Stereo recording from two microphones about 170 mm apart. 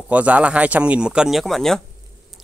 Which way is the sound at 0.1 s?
10° right (ahead or behind).